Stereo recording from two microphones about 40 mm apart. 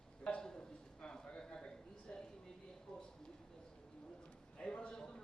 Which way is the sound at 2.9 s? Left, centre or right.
Centre.